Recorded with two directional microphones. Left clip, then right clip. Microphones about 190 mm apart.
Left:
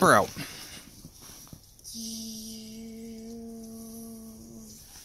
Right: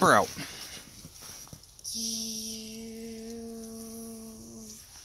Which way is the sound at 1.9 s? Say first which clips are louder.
Right 5 dB; 35° right (ahead or behind).